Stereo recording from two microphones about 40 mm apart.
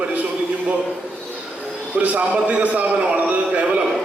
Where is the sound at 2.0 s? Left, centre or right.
Right.